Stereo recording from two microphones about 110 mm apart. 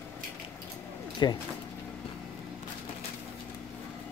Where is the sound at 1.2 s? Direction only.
40° left (ahead or behind).